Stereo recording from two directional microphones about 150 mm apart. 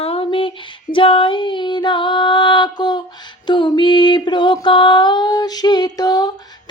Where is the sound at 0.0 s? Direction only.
40° left (ahead or behind).